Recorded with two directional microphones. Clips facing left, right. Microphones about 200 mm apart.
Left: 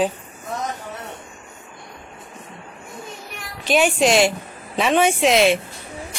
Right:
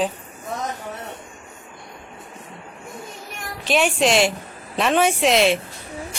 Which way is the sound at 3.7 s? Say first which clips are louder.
Left 2 dB; centre (ahead or behind).